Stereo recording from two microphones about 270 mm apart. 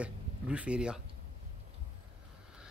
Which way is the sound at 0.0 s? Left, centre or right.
Centre.